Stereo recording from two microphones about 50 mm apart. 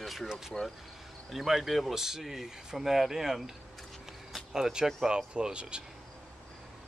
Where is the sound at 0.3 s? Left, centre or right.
Centre.